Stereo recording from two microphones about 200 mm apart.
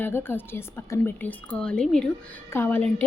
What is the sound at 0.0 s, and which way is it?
A woman's voice, 10° left (ahead or behind).